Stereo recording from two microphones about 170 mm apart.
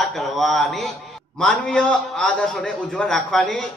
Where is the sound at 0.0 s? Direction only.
Centre (ahead or behind).